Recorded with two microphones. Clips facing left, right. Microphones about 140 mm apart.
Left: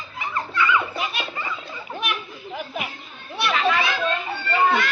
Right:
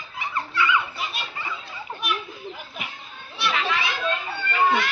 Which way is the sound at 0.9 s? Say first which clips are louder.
Left 4 dB; 75° left (ahead or behind).